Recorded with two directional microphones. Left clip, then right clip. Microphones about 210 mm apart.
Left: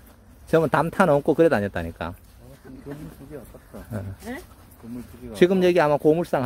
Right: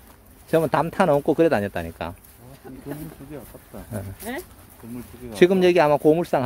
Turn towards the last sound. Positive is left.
turn(degrees=0)  # may be behind; listen again after turning